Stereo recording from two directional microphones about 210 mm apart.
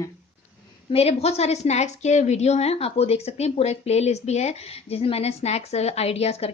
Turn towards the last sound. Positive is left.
turn(degrees=30)  # may be behind; listen again after turning